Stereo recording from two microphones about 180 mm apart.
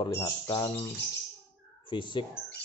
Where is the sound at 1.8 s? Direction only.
25° left (ahead or behind).